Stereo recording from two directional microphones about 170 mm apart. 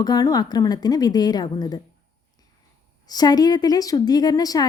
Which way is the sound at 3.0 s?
20° left (ahead or behind).